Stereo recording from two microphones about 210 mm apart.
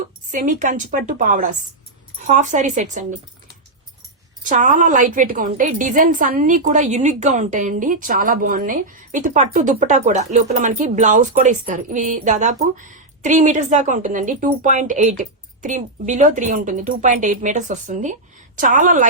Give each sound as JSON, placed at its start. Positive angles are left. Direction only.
{"t": 0.3, "sound": "a woman's voice", "side_deg": -40}
{"t": 4.4, "sound": "a woman's voice", "side_deg": -35}